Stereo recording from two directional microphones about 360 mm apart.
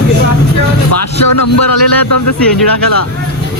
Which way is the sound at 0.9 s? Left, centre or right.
Left.